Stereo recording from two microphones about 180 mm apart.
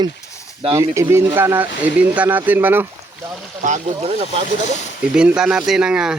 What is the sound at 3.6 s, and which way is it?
Speech, 40° right (ahead or behind).